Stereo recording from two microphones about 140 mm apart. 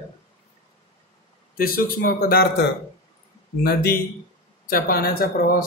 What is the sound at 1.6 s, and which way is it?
Speech, 90° left.